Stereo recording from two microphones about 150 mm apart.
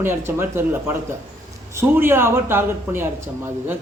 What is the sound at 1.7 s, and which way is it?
Speech, 15° right (ahead or behind).